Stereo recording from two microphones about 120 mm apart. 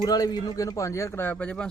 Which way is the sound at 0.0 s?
35° left (ahead or behind).